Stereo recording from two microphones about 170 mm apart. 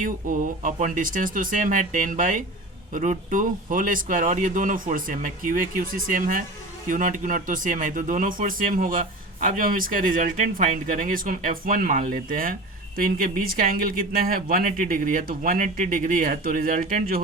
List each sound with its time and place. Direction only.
0.0 s speech: 50° right (ahead or behind)